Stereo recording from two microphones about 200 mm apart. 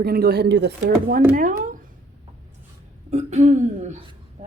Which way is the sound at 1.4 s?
40° right (ahead or behind).